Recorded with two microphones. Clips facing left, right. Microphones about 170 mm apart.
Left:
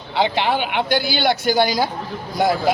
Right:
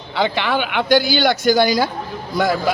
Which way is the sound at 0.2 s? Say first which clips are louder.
Even; 55° right (ahead or behind).